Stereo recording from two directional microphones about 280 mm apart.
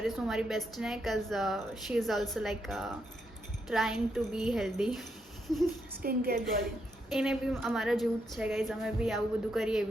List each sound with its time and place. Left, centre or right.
0.0 s a woman's voice: centre
6.0 s a woman's voice: right
7.1 s a woman's voice: centre